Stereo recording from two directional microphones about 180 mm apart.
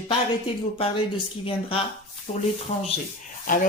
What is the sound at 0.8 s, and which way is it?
Speech, 30° left (ahead or behind).